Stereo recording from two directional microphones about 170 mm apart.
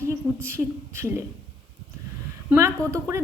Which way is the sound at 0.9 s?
15° right (ahead or behind).